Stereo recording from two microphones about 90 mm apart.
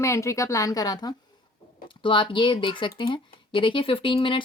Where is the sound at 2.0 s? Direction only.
65° left (ahead or behind).